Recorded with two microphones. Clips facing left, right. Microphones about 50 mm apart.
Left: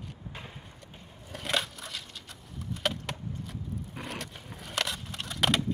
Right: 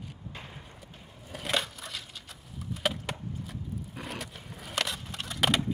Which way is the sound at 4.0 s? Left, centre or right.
Centre.